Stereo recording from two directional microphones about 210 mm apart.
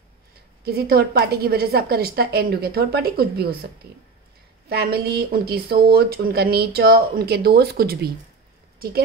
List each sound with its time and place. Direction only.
0.7 s speech: 50° right (ahead or behind)
4.6 s speech: 50° right (ahead or behind)
8.7 s a sound: 45° right (ahead or behind)